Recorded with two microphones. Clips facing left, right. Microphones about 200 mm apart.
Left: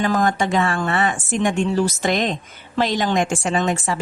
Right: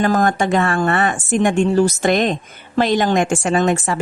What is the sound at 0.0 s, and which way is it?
A woman's voice, 45° right (ahead or behind).